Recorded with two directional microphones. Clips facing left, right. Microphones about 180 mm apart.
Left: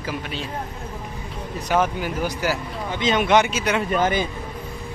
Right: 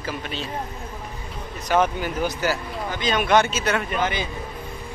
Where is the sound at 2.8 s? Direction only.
25° left (ahead or behind).